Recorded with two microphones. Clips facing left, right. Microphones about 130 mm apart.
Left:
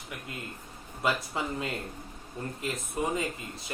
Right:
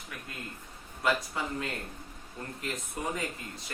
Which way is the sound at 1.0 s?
25° left (ahead or behind).